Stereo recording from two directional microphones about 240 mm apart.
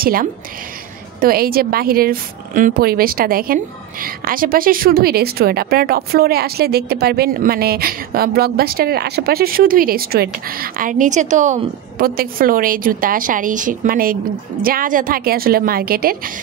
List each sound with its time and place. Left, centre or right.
0.0 s a woman's voice: right